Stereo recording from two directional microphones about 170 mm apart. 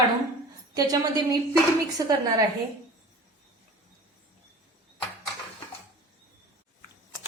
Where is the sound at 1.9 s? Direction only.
20° right (ahead or behind).